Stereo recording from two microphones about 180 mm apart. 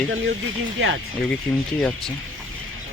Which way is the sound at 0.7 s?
90° right.